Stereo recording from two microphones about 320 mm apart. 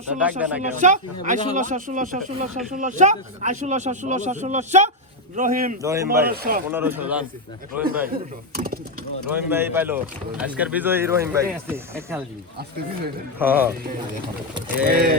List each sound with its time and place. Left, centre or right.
0.1 s speech: centre
0.7 s speech: right
5.8 s speech: centre
6.2 s speech: right
6.7 s speech: centre
8.1 s speech: right
9.3 s speech: centre
13.4 s speech: centre
14.8 s speech: right